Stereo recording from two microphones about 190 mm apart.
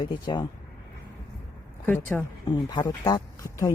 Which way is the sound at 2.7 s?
20° left (ahead or behind).